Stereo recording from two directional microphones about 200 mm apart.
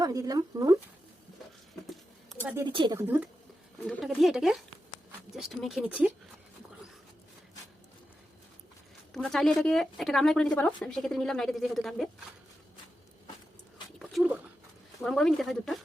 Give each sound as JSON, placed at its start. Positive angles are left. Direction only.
{"t": 0.0, "sound": "speech", "side_deg": -20}
{"t": 1.9, "sound": "a sound", "side_deg": 0}
{"t": 2.6, "sound": "a woman's voice", "side_deg": -25}
{"t": 3.0, "sound": "speech", "side_deg": -10}
{"t": 3.8, "sound": "speech", "side_deg": 0}
{"t": 9.1, "sound": "speech", "side_deg": 0}
{"t": 14.0, "sound": "a sound", "side_deg": 0}
{"t": 15.0, "sound": "speech", "side_deg": 5}